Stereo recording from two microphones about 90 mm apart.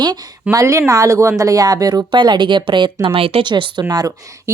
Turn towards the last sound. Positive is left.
turn(degrees=-45)  # may be behind; listen again after turning